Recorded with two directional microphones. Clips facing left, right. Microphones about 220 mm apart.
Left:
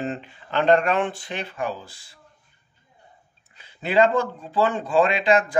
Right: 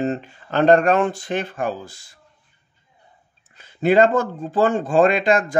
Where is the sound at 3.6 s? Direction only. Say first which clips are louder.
Right 4 dB; 45° right (ahead or behind).